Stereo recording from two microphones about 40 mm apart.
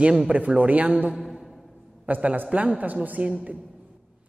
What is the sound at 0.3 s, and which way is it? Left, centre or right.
Speech, right.